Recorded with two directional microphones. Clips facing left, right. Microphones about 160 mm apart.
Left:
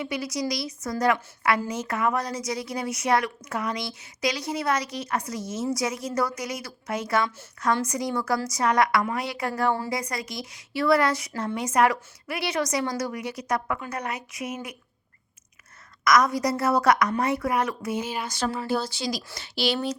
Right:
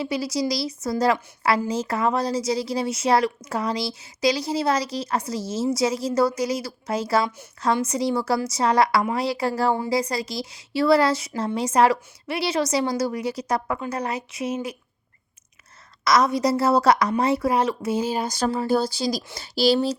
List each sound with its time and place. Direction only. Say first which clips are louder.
0.0 s a woman's voice: right 4 dB; 30° right (ahead or behind)
16.0 s a woman's voice: right 2 dB; 25° right (ahead or behind)